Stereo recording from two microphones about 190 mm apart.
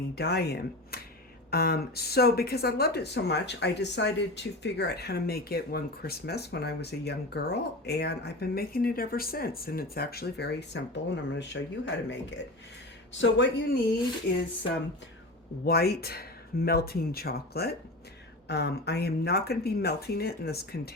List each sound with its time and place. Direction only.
0.2 s speech: 60° left (ahead or behind)
15.6 s speech: 55° left (ahead or behind)